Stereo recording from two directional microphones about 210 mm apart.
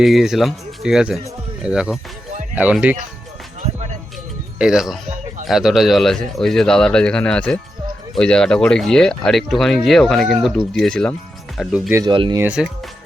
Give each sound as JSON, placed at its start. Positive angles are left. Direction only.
{"t": 0.0, "sound": "speech", "side_deg": 0}
{"t": 4.5, "sound": "speech", "side_deg": -5}
{"t": 11.9, "sound": "speech", "side_deg": -15}
{"t": 12.1, "sound": "speech", "side_deg": -25}
{"t": 12.4, "sound": "speech", "side_deg": -5}